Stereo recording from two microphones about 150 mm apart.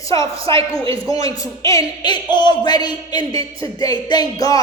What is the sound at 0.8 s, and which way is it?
Speech, 35° right (ahead or behind).